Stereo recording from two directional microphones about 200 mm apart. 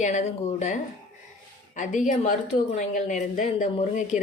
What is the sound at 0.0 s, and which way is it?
Speech, 35° left (ahead or behind).